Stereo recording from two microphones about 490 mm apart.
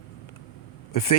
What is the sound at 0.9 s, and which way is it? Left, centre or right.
Speech, left.